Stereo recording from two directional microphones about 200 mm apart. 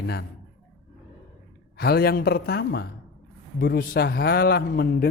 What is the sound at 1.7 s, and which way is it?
Speech, 50° left (ahead or behind).